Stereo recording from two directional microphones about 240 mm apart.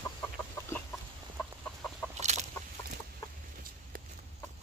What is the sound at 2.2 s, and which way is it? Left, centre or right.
Chicken, right.